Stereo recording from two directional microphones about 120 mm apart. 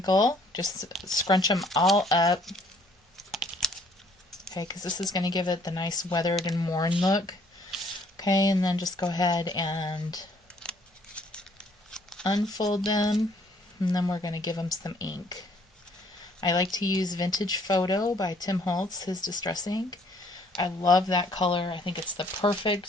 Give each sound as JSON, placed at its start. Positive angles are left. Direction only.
{"t": 0.0, "sound": "speech", "side_deg": 35}
{"t": 1.8, "sound": "speech", "side_deg": 0}
{"t": 2.0, "sound": "speech", "side_deg": 30}
{"t": 3.2, "sound": "computer keyboard", "side_deg": 0}
{"t": 4.5, "sound": "speech", "side_deg": 35}
{"t": 10.6, "sound": "scissors", "side_deg": 10}
{"t": 11.9, "sound": "a sound", "side_deg": 5}
{"t": 12.2, "sound": "speech", "side_deg": 35}